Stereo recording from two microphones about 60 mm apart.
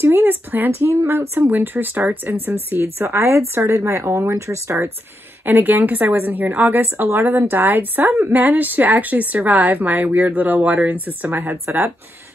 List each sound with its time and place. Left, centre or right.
0.0 s speech: right
0.7 s speech: right
5.4 s a woman's voice: right